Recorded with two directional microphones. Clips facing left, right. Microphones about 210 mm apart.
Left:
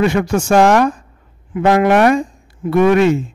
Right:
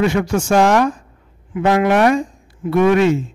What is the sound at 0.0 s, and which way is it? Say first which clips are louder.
A man's voice: left 2 dB; 55° left (ahead or behind).